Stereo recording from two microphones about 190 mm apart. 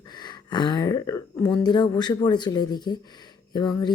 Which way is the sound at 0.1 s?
20° left (ahead or behind).